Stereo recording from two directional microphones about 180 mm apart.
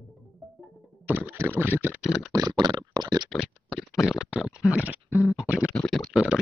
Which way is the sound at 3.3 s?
Centre (ahead or behind).